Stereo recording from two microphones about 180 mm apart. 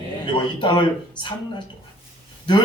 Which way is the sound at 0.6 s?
25° left (ahead or behind).